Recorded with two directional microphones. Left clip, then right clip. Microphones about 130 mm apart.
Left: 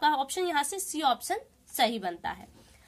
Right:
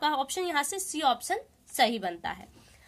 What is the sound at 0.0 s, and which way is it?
A woman's voice, 25° right (ahead or behind).